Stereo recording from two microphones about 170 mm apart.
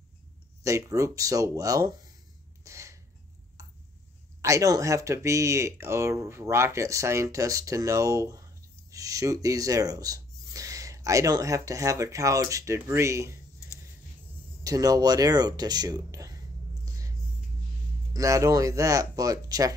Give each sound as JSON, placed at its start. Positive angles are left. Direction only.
{"t": 0.7, "sound": "speech", "side_deg": -20}
{"t": 2.6, "sound": "a sound", "side_deg": -20}
{"t": 4.4, "sound": "speech", "side_deg": -20}
{"t": 14.6, "sound": "speech", "side_deg": -20}
{"t": 18.1, "sound": "speech", "side_deg": -20}